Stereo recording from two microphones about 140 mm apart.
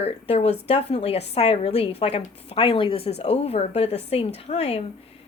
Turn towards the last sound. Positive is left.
turn(degrees=45)  # may be behind; listen again after turning